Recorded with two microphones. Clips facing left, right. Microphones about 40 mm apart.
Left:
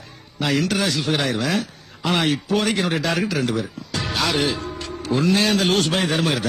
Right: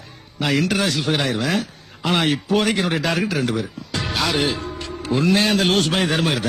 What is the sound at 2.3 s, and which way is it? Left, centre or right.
Speech, centre.